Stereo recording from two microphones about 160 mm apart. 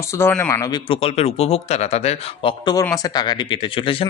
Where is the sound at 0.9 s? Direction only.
40° left (ahead or behind).